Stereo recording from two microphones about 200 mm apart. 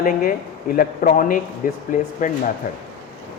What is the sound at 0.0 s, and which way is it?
A man's voice, 45° left (ahead or behind).